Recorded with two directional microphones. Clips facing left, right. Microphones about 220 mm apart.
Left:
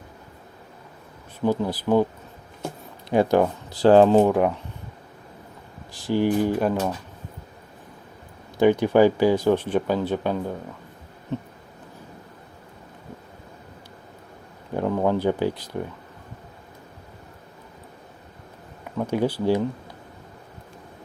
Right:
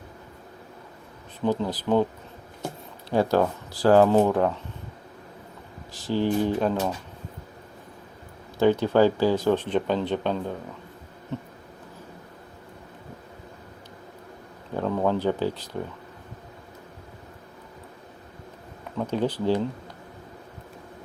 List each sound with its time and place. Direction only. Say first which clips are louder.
1.5 s speech: left 2 dB; 10° left (ahead or behind)
3.1 s speech: left 3 dB; 15° left (ahead or behind)
5.9 s speech: left 3 dB; 15° left (ahead or behind)
8.5 s speech: left 2 dB; 15° left (ahead or behind)
14.8 s speech: left 2 dB; 15° left (ahead or behind)
18.9 s speech: left 2 dB; 10° left (ahead or behind)